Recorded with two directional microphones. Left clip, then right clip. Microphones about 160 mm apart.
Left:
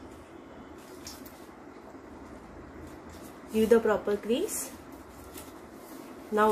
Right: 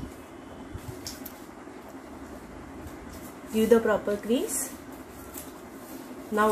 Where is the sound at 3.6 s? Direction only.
15° left (ahead or behind).